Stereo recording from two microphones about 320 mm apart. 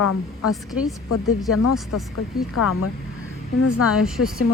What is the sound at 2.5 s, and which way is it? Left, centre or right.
A woman's voice, left.